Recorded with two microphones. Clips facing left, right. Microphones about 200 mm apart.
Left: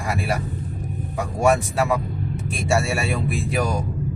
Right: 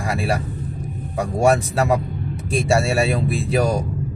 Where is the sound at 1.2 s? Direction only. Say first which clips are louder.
Right 2 dB; 30° right (ahead or behind).